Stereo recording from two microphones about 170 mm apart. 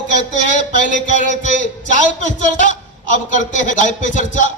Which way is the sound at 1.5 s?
45° left (ahead or behind).